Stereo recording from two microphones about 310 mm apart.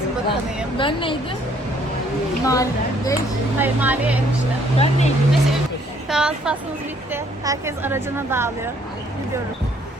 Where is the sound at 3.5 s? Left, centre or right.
Centre.